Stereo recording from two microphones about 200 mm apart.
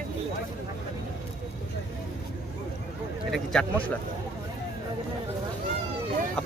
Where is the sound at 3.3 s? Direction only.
5° left (ahead or behind).